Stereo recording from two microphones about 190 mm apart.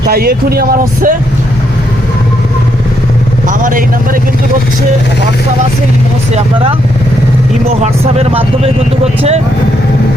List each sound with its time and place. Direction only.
0.1 s speech: 55° right (ahead or behind)
3.4 s speech: 45° right (ahead or behind)
7.8 s speech: 35° right (ahead or behind)